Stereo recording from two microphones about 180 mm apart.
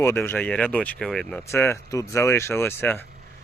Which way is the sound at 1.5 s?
15° left (ahead or behind).